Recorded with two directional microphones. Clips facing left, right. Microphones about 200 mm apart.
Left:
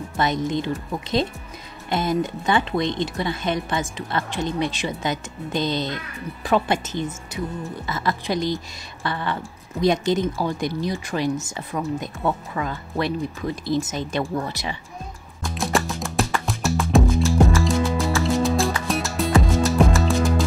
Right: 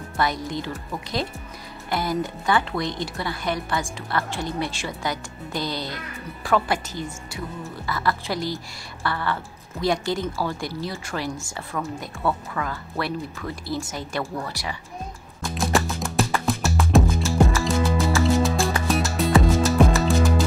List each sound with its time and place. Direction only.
0.2 s speech: 20° left (ahead or behind)
1.9 s speech: 20° left (ahead or behind)
15.4 s music: centre (ahead or behind)